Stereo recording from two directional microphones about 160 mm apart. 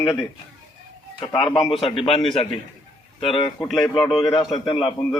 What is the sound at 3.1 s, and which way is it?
A man's voice, 35° left (ahead or behind).